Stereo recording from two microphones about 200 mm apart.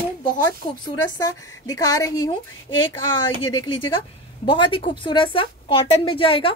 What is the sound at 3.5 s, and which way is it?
A woman's voice, 25° left (ahead or behind).